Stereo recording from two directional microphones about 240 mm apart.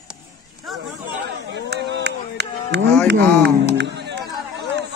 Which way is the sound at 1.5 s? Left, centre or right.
Right.